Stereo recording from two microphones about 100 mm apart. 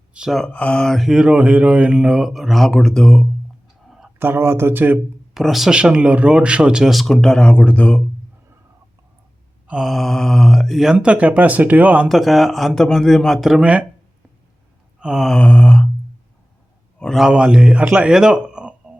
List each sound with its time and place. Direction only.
0.1 s speech: 5° right (ahead or behind)
0.5 s speech: 10° left (ahead or behind)
3.8 s a sound: 5° right (ahead or behind)
4.2 s speech: 25° right (ahead or behind)
5.3 s speech: centre (ahead or behind)
9.6 s speech: 5° right (ahead or behind)
12.0 s speech: centre (ahead or behind)
14.9 s gasp: 5° right (ahead or behind)
15.4 s groan: 15° left (ahead or behind)
17.0 s a man's voice: 5° left (ahead or behind)
17.2 s speech: 10° right (ahead or behind)